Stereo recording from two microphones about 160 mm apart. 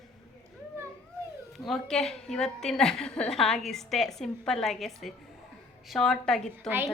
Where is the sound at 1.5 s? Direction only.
Centre (ahead or behind).